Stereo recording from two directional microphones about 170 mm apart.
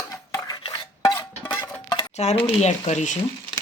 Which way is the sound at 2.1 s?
40° left (ahead or behind).